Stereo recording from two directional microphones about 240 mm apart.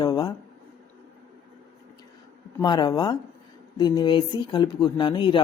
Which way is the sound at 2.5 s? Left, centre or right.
Centre.